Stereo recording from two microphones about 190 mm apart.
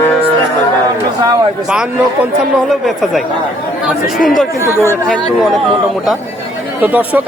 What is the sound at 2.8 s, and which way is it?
A man's voice, centre (ahead or behind).